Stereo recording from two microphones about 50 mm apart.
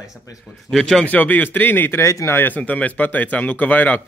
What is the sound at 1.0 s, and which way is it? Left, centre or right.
Speech, left.